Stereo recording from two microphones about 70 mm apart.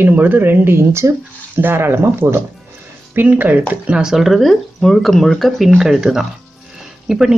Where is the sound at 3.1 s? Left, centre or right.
Right.